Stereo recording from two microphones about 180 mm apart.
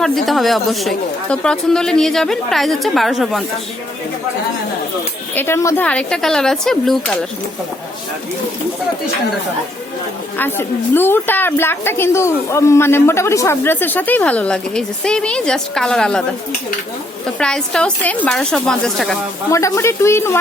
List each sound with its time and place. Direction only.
0.0 s speech: centre (ahead or behind)
5.3 s speech: 10° left (ahead or behind)
10.3 s a woman's voice: 10° left (ahead or behind)
17.4 s speech: 5° left (ahead or behind)
19.5 s a woman's voice: 15° left (ahead or behind)